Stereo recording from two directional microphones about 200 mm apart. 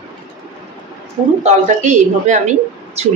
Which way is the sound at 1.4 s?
35° right (ahead or behind).